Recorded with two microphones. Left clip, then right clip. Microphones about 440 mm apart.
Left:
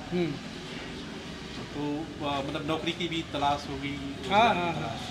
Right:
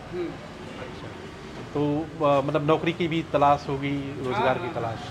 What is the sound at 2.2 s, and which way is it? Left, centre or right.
Speech, right.